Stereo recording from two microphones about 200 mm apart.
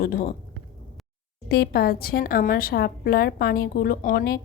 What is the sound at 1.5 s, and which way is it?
A woman's voice, 50° left (ahead or behind).